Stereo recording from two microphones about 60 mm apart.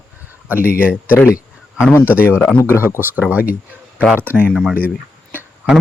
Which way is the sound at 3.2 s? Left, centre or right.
Right.